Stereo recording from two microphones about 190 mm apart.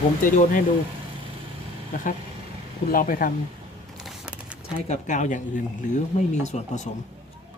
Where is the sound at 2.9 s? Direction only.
45° left (ahead or behind).